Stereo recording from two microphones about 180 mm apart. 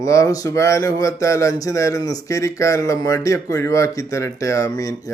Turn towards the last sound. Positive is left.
turn(degrees=20)  # may be behind; listen again after turning